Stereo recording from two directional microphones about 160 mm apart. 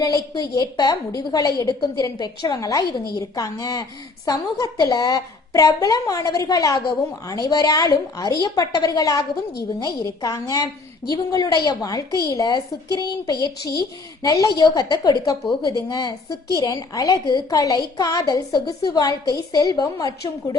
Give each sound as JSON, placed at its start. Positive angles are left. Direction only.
{"t": 0.5, "sound": "a woman's voice", "side_deg": 25}